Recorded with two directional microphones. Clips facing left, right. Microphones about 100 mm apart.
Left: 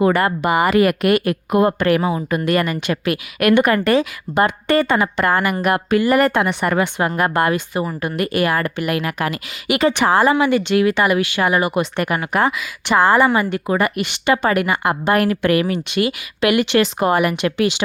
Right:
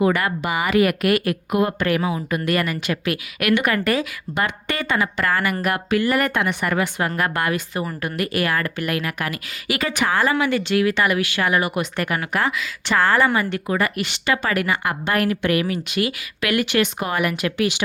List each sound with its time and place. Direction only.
0.0 s a woman's voice: 40° left (ahead or behind)
1.0 s a woman's voice: 30° left (ahead or behind)
2.5 s a woman's voice: 30° left (ahead or behind)
7.7 s a woman's voice: 20° left (ahead or behind)
15.3 s a woman's voice: 45° left (ahead or behind); by 17.8 s 30° left (ahead or behind)